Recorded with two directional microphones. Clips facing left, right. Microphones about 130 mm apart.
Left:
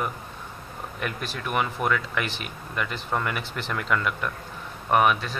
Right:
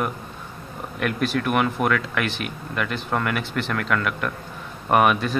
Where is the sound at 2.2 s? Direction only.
65° right (ahead or behind).